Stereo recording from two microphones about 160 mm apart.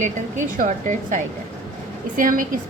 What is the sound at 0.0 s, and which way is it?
A woman's voice, 55° right (ahead or behind).